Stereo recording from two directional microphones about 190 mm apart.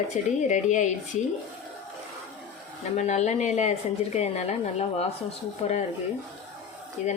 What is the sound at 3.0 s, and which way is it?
Speech, 35° left (ahead or behind).